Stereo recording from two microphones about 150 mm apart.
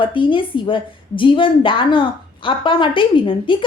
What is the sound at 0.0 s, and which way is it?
A woman's voice, 35° left (ahead or behind).